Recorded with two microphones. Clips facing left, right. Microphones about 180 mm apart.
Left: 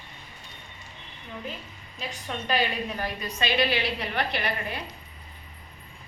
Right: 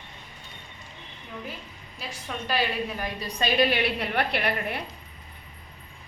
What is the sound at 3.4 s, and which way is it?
A woman's voice, 45° right (ahead or behind).